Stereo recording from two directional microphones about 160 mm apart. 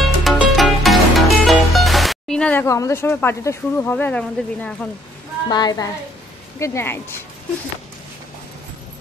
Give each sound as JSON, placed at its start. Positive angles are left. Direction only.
{"t": 0.0, "sound": "music", "side_deg": 0}
{"t": 2.6, "sound": "speech", "side_deg": 20}
{"t": 5.5, "sound": "a woman's voice", "side_deg": 25}